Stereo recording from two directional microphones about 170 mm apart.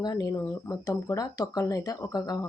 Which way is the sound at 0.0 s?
20° left (ahead or behind).